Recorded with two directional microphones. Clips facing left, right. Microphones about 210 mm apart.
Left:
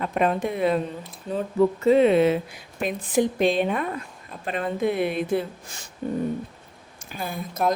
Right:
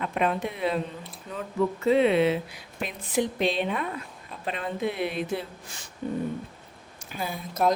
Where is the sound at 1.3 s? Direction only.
35° left (ahead or behind).